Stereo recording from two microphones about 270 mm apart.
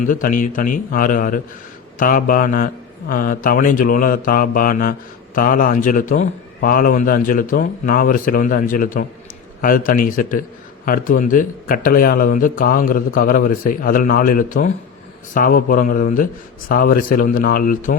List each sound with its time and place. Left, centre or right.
0.0 s speech: left